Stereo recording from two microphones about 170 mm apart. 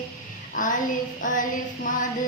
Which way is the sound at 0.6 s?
50° left (ahead or behind).